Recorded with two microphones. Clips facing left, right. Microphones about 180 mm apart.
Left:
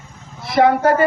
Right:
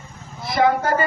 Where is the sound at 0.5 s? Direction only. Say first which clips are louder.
Left 5 dB; 65° left (ahead or behind).